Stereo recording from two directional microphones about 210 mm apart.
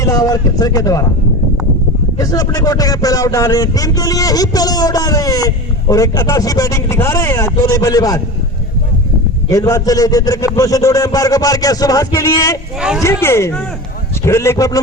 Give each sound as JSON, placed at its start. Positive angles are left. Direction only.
{"t": 0.0, "sound": "speech", "side_deg": 15}
{"t": 2.1, "sound": "speech", "side_deg": 15}
{"t": 9.5, "sound": "speech", "side_deg": 15}